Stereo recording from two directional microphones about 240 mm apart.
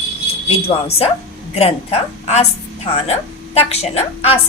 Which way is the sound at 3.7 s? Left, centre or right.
Left.